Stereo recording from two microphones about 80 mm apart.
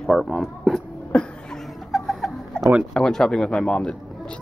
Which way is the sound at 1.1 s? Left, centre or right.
Centre.